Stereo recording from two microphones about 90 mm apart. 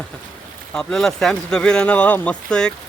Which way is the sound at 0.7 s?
5° left (ahead or behind).